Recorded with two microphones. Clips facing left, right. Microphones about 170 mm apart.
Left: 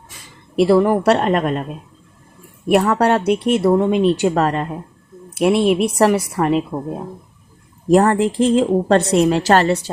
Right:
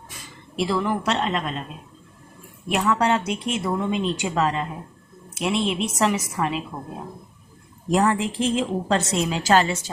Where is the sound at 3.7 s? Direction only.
45° left (ahead or behind).